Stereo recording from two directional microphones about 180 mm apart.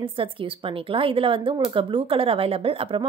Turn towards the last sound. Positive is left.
turn(degrees=-30)  # may be behind; listen again after turning